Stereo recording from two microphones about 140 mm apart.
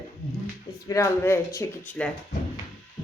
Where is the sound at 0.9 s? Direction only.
20° left (ahead or behind).